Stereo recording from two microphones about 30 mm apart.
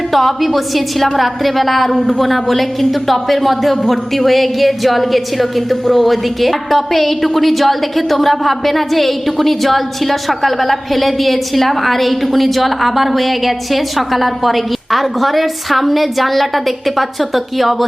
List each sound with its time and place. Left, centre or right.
0.1 s a woman's voice: centre